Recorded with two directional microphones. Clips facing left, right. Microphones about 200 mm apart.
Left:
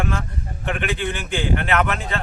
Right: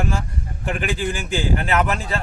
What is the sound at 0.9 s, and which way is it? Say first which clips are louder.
Speech: right 1 dB; 40° right (ahead or behind).